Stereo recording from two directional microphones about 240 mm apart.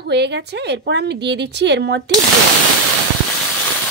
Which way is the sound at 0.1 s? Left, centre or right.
Right.